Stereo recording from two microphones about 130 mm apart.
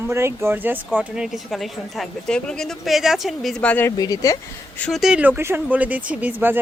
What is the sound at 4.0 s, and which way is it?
Speech, 30° left (ahead or behind).